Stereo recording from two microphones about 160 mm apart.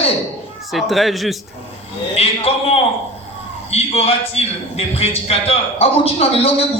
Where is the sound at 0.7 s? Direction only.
Centre (ahead or behind).